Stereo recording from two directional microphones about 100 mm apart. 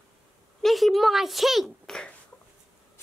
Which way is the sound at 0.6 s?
Centre (ahead or behind).